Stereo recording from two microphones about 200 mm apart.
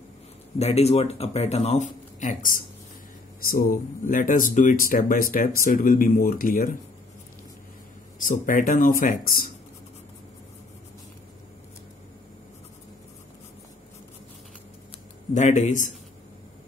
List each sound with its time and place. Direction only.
0.6 s speech: 30° left (ahead or behind)
8.2 s speech: 40° left (ahead or behind)
15.3 s speech: 35° left (ahead or behind)